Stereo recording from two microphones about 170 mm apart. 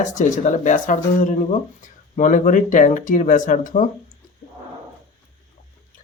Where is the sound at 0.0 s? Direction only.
45° left (ahead or behind).